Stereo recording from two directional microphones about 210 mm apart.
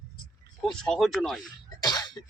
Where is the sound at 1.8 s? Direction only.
20° left (ahead or behind).